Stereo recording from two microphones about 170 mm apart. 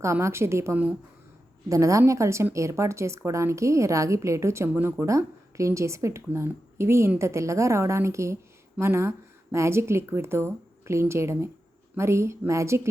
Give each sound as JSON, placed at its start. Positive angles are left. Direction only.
{"t": 0.0, "sound": "a woman's voice", "side_deg": -15}